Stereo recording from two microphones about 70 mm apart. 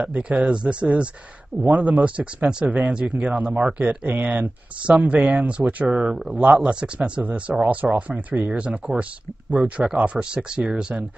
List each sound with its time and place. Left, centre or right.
0.0 s speech: centre
6.3 s speech: right